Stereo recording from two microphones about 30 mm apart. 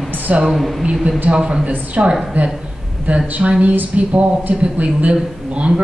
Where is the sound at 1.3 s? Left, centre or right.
Right.